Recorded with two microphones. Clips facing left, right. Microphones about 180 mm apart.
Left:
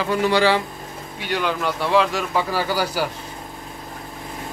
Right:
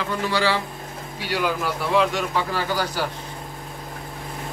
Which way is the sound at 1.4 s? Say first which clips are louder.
Left 1 dB; 5° right (ahead or behind).